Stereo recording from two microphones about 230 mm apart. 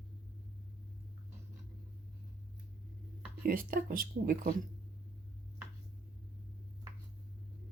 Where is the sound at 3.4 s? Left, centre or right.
Right.